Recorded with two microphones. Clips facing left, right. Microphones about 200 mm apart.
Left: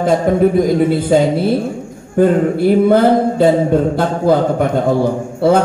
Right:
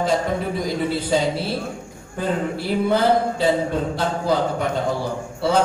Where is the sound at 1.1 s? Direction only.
55° left (ahead or behind).